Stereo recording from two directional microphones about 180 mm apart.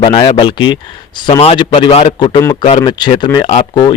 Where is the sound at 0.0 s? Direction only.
25° left (ahead or behind).